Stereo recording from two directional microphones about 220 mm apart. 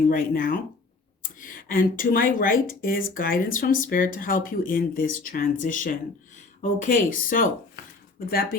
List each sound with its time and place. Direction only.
0.1 s speech: 40° left (ahead or behind)